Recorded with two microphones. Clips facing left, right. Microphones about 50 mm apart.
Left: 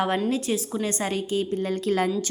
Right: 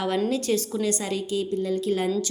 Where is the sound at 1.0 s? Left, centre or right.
Left.